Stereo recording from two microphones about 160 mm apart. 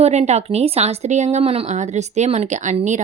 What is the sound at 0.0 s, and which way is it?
Speech, 45° right (ahead or behind).